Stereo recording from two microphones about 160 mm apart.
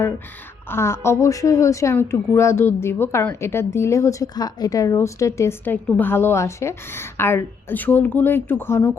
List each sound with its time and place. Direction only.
0.7 s a woman's voice: 15° left (ahead or behind)